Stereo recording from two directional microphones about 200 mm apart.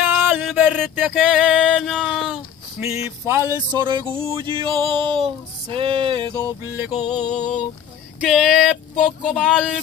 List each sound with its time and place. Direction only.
0.0 s a sound: 10° right (ahead or behind); by 6.2 s 25° right (ahead or behind)
6.6 s music: 5° right (ahead or behind)
7.0 s music: 20° left (ahead or behind)
8.2 s speech: 5° right (ahead or behind)